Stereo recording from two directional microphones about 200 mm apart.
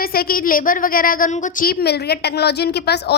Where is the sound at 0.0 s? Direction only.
50° left (ahead or behind).